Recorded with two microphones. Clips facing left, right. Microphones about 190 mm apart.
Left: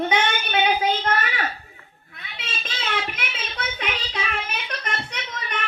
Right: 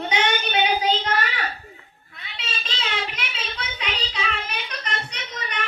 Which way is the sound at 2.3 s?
50° left (ahead or behind).